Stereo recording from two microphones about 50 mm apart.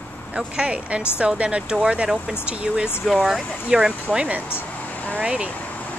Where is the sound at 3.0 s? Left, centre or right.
Centre.